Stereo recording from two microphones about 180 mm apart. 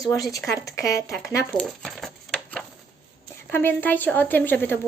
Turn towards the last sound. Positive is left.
turn(degrees=10)  # may be behind; listen again after turning